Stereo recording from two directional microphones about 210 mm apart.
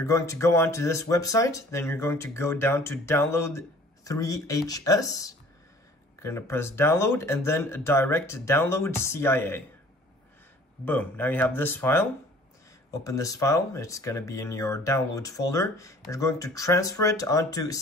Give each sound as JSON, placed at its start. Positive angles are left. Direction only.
{"t": 0.0, "sound": "speech", "side_deg": 15}
{"t": 10.9, "sound": "speech", "side_deg": 10}